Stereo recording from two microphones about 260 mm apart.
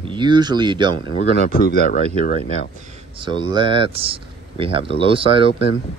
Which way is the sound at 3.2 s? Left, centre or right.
Centre.